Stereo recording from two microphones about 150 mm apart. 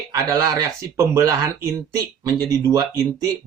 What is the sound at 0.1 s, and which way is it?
Speech, 25° right (ahead or behind).